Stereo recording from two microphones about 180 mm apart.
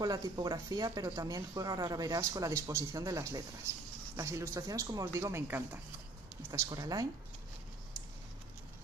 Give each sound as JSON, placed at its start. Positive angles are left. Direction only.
{"t": 0.0, "sound": "speech", "side_deg": -20}